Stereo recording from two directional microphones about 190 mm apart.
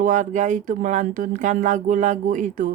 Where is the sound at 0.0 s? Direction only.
40° right (ahead or behind).